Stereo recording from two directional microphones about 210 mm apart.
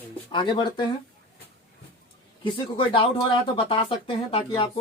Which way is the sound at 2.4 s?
25° left (ahead or behind).